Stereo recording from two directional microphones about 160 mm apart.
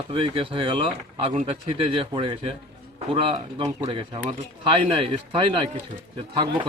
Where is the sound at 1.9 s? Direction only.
35° right (ahead or behind).